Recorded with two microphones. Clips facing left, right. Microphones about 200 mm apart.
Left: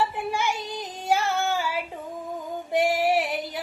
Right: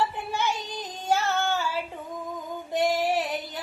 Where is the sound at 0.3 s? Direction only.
10° left (ahead or behind).